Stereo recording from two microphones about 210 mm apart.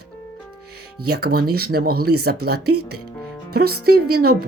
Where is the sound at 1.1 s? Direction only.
50° right (ahead or behind).